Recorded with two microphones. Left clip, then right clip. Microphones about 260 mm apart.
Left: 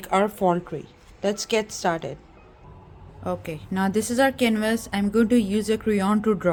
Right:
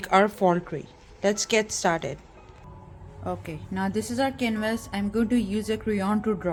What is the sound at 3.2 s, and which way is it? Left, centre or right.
A woman's voice, centre.